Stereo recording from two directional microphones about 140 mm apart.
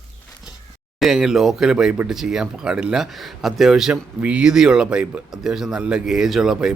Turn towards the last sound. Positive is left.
turn(degrees=-5)  # may be behind; listen again after turning